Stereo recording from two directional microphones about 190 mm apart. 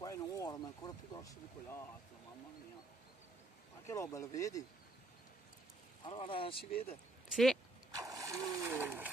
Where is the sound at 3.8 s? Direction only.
15° left (ahead or behind).